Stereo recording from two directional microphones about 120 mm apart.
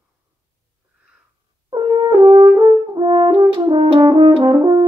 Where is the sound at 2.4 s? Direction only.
40° right (ahead or behind).